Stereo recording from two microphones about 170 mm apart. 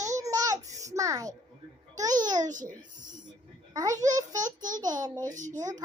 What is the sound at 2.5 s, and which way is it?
Speech, 50° right (ahead or behind).